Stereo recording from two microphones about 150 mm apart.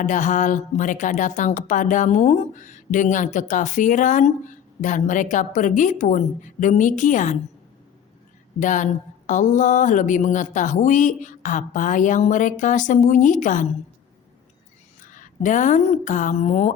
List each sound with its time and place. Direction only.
0.0 s speech: 55° left (ahead or behind)
8.5 s speech: 55° left (ahead or behind)
15.0 s speech: 60° left (ahead or behind)